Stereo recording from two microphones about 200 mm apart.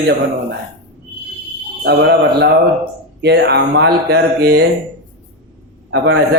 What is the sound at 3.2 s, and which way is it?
Speech, 55° right (ahead or behind).